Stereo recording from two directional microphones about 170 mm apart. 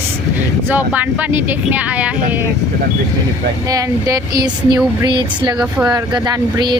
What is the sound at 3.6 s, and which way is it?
Speech, 20° right (ahead or behind).